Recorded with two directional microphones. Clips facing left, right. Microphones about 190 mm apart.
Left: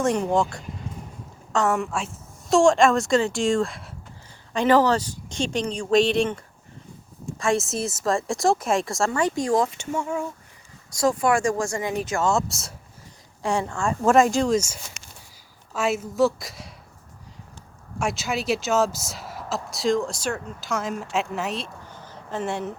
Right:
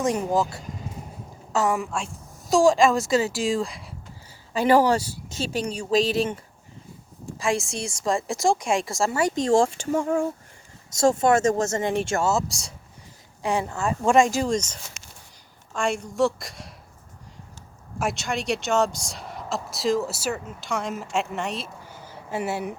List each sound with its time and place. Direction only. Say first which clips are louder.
0.0 s speech: left 1 dB; centre (ahead or behind)
4.5 s speech: even; 10° right (ahead or behind)
9.3 s speech: right 2 dB; 25° right (ahead or behind)
12.2 s a woman's voice: left 1 dB; centre (ahead or behind)
15.7 s speech: left 1 dB; 5° left (ahead or behind)
18.0 s speech: left 1 dB; centre (ahead or behind)